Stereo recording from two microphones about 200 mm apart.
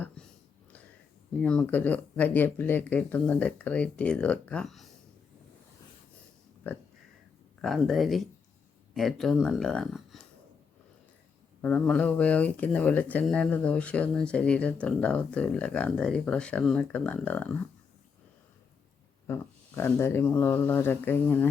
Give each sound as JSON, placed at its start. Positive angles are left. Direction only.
{"t": 1.4, "sound": "speech", "side_deg": 5}
{"t": 7.6, "sound": "speech", "side_deg": 0}
{"t": 11.6, "sound": "speech", "side_deg": 5}
{"t": 19.3, "sound": "speech", "side_deg": 10}